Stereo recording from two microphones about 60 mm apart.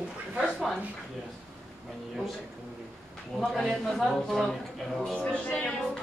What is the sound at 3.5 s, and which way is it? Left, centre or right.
A man's voice, centre.